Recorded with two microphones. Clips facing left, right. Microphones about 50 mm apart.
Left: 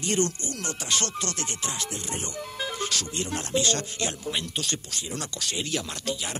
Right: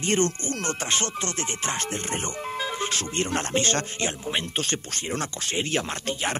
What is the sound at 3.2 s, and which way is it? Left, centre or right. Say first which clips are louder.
Speech: right 1 dB; right.